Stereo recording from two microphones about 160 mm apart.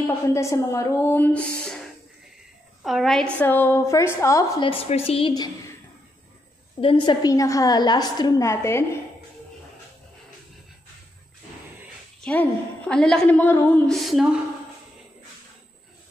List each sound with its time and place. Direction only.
0.0 s speech: 20° left (ahead or behind)
2.8 s speech: centre (ahead or behind)
3.3 s speech: 15° left (ahead or behind)
4.6 s speech: 35° left (ahead or behind)
5.3 s a woman's voice: 25° left (ahead or behind)
6.8 s a woman's voice: 30° left (ahead or behind)
12.3 s speech: 10° left (ahead or behind)
13.8 s speech: centre (ahead or behind)